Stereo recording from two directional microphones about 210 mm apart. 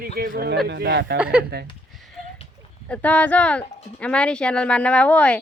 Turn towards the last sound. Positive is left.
turn(degrees=5)  # may be behind; listen again after turning